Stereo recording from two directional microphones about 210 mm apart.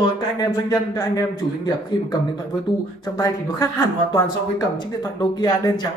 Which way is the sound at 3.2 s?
15° left (ahead or behind).